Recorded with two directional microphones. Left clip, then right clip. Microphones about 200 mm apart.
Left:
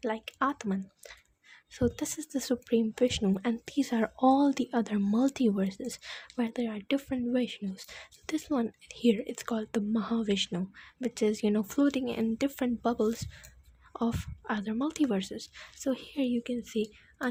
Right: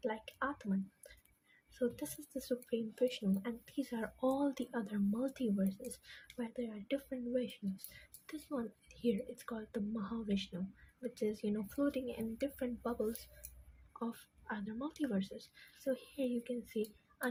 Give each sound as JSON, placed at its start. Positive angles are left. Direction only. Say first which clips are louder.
{"t": 0.0, "sound": "speech", "louder": "left 9 dB", "side_deg": 50}